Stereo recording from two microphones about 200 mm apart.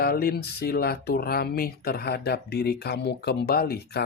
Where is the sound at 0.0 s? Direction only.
50° left (ahead or behind).